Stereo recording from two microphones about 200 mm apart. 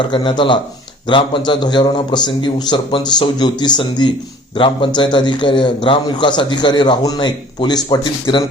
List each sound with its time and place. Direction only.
0.0 s a man's voice: 25° left (ahead or behind)